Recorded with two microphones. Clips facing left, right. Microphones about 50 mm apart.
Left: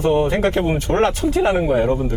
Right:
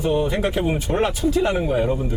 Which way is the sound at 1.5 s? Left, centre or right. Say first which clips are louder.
Left 4 dB; left.